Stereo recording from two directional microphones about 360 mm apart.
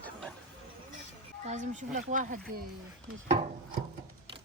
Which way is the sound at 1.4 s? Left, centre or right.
Centre.